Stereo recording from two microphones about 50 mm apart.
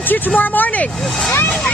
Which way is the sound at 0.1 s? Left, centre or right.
Left.